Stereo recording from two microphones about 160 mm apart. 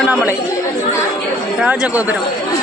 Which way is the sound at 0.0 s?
10° right (ahead or behind).